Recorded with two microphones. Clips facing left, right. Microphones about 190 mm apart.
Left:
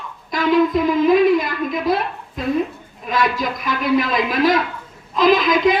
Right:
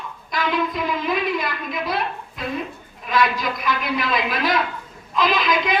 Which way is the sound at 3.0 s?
45° left (ahead or behind).